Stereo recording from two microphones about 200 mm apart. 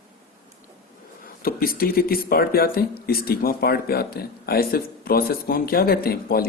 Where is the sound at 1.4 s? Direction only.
45° left (ahead or behind).